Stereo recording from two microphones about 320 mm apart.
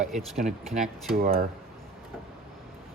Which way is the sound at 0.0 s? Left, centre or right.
Centre.